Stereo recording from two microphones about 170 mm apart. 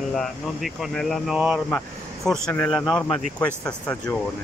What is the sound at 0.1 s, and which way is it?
Speech, centre (ahead or behind).